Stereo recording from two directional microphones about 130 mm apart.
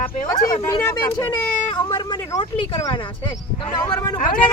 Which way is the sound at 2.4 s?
40° left (ahead or behind).